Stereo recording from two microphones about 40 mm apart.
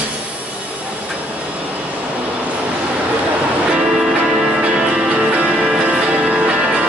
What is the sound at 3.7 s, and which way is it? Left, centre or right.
Music, right.